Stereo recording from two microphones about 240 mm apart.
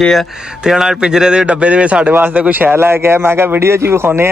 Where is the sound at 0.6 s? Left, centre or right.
Centre.